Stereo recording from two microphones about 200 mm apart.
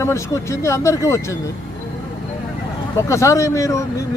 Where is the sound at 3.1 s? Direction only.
15° left (ahead or behind).